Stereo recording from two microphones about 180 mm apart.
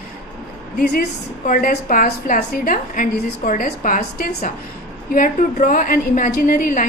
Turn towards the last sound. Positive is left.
turn(degrees=45)  # may be behind; listen again after turning